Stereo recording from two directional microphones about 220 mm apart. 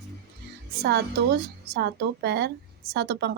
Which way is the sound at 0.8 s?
50° right (ahead or behind).